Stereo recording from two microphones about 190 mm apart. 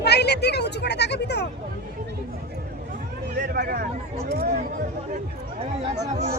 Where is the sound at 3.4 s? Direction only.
55° right (ahead or behind).